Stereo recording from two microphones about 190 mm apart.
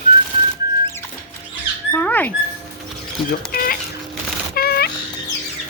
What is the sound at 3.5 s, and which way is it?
Chicken, 50° left (ahead or behind).